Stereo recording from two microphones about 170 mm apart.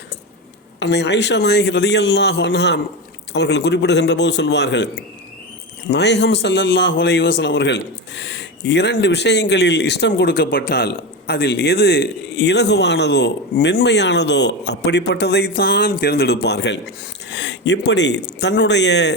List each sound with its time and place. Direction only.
0.8 s a man's voice: 85° left
5.9 s a man's voice: 90° left